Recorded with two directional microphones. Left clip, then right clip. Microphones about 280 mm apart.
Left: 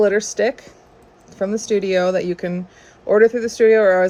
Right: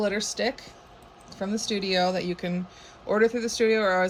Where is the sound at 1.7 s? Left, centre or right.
Centre.